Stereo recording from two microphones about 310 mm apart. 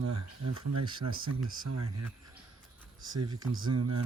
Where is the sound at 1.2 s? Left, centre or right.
Right.